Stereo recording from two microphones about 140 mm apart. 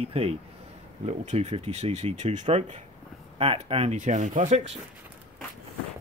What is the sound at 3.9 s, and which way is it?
Speech, 60° right (ahead or behind).